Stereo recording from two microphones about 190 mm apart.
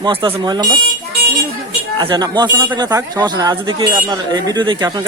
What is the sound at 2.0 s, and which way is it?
Speech, 25° right (ahead or behind).